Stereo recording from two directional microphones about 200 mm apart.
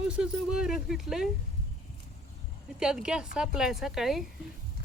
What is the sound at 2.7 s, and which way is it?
A woman's voice, 5° right (ahead or behind).